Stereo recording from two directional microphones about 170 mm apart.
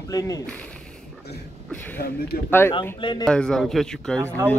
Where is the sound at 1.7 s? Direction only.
10° left (ahead or behind).